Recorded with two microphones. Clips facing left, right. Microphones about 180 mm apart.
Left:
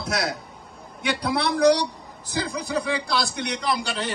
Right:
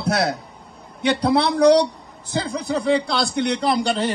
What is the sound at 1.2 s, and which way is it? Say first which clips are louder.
A man's voice: right 3 dB; 60° right (ahead or behind).